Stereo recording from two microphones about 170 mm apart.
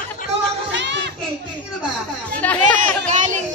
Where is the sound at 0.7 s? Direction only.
90° right.